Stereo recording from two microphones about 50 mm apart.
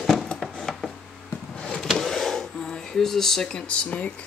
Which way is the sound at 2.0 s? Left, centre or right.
Centre.